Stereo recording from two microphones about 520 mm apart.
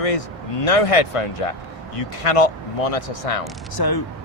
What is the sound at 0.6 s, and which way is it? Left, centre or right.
Speech, left.